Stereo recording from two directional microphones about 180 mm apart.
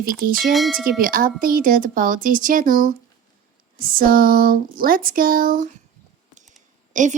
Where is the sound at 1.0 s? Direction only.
50° right (ahead or behind).